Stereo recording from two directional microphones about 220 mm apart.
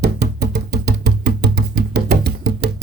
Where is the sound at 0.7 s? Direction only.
45° right (ahead or behind).